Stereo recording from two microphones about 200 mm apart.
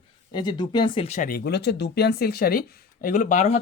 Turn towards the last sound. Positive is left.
turn(degrees=35)  # may be behind; listen again after turning